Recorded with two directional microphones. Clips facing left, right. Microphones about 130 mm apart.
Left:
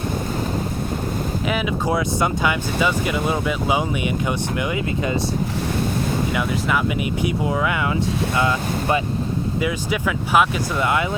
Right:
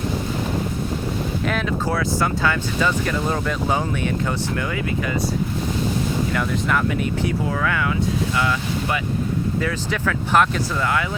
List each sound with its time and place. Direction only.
1.5 s speech: 10° left (ahead or behind)
6.3 s speech: 10° left (ahead or behind); by 9.0 s 25° left (ahead or behind)
9.6 s speech: 10° left (ahead or behind)
10.8 s speech: 20° left (ahead or behind)